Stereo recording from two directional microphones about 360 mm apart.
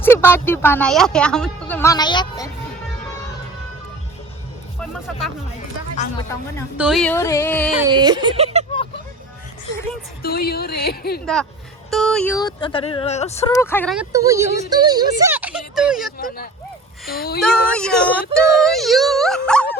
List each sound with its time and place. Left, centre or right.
0.0 s speech: centre
4.8 s speech: centre
6.0 s speech: centre
6.7 s speech: centre
7.8 s speech: centre
10.2 s a woman's voice: left
11.9 s speech: centre
16.1 s a woman's voice: left
17.4 s speech: centre